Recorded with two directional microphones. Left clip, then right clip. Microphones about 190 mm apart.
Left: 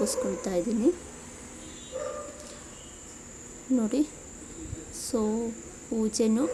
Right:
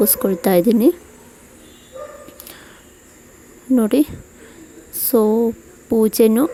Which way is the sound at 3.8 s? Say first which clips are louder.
Right 13 dB; 45° right (ahead or behind).